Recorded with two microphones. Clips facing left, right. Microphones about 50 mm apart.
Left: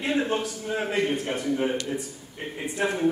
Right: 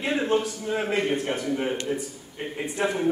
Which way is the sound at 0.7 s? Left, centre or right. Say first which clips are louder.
Right 1 dB; right.